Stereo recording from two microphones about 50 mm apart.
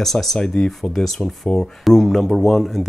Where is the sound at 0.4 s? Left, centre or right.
Centre.